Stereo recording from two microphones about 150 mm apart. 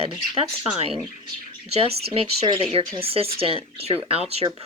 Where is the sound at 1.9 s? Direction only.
90° right.